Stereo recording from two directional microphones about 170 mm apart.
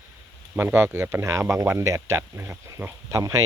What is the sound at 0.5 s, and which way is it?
Speech, 10° right (ahead or behind).